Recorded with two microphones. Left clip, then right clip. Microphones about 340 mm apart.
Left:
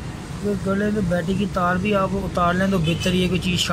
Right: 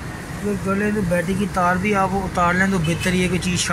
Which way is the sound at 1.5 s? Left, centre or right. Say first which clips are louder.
Right 2 dB; centre.